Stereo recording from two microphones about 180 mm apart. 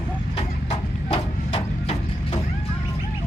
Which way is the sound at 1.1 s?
35° left (ahead or behind).